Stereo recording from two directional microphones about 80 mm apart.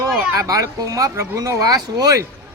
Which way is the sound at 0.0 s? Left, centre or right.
Right.